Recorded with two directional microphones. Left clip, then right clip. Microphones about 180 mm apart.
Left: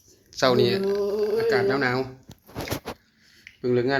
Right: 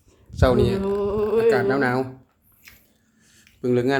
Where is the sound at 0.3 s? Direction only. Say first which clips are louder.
Right 1 dB; centre (ahead or behind).